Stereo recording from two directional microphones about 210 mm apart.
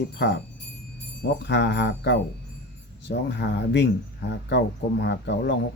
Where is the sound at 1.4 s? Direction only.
55° left (ahead or behind).